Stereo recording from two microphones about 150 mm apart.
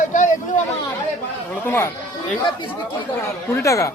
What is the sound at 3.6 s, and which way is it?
Speech, 20° left (ahead or behind).